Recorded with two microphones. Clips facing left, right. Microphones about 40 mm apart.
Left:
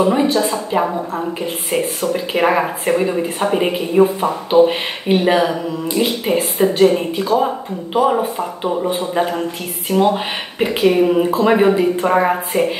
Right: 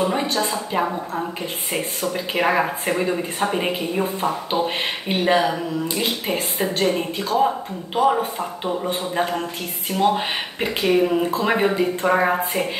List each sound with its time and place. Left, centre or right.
0.1 s speech: centre
6.9 s speech: centre
10.6 s speech: centre